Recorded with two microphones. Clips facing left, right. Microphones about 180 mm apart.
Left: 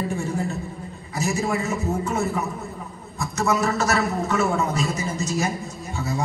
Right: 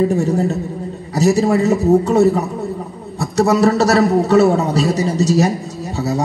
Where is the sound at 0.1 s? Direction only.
40° right (ahead or behind).